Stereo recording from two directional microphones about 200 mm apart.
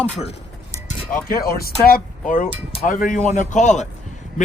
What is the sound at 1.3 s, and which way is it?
Speech, 50° left (ahead or behind).